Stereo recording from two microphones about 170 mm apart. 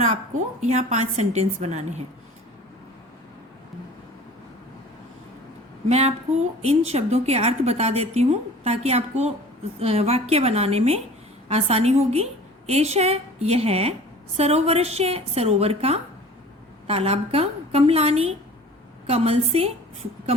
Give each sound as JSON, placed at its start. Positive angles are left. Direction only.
{"t": 0.6, "sound": "a woman's voice", "side_deg": -40}
{"t": 5.9, "sound": "a woman's voice", "side_deg": -40}